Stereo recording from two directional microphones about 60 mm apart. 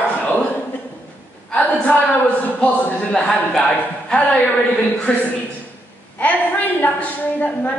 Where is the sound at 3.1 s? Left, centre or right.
Centre.